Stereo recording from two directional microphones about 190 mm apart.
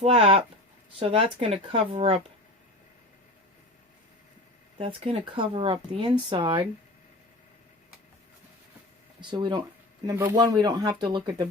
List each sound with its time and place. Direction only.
0.0 s speech: 30° right (ahead or behind)
4.8 s speech: 25° right (ahead or behind)
9.3 s speech: 25° right (ahead or behind)